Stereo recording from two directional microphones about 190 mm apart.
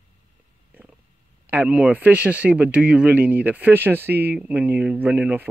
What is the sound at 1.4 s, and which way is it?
Speech, 10° right (ahead or behind).